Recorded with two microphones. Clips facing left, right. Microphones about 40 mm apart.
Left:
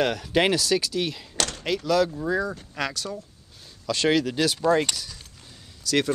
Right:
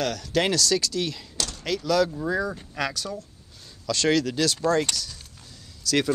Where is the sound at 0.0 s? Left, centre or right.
Left.